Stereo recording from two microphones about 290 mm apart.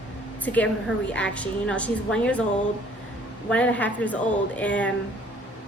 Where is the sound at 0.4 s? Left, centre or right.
Centre.